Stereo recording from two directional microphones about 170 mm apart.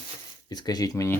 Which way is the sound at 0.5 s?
25° left (ahead or behind).